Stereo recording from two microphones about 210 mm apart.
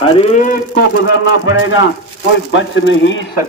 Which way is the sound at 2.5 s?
60° left (ahead or behind).